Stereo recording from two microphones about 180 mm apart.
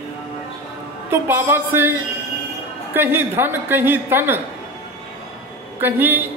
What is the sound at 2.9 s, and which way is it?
A man's voice, 10° right (ahead or behind).